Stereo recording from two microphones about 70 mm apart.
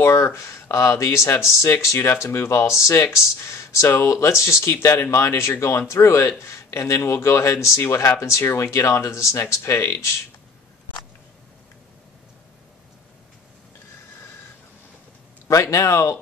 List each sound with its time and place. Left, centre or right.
0.0 s speech: left
15.4 s speech: left